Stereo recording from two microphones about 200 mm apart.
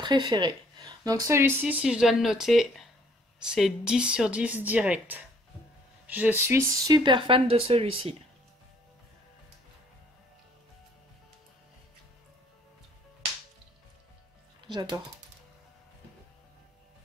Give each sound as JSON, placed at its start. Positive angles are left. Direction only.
{"t": 0.0, "sound": "a woman's voice", "side_deg": -20}
{"t": 14.7, "sound": "speech", "side_deg": -20}